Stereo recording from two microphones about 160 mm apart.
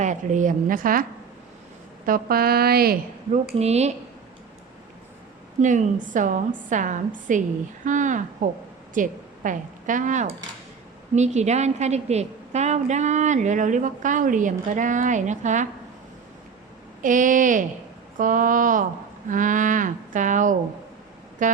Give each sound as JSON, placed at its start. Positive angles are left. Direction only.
{"t": 0.0, "sound": "a woman's voice", "side_deg": -50}
{"t": 2.0, "sound": "speech", "side_deg": -65}
{"t": 3.5, "sound": "speech", "side_deg": -40}
{"t": 5.5, "sound": "a woman's voice", "side_deg": -50}
{"t": 17.0, "sound": "a woman's voice", "side_deg": -55}
{"t": 21.4, "sound": "keyboard", "side_deg": -55}